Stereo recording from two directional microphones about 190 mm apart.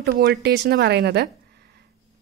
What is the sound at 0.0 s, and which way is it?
Speech, 55° right (ahead or behind).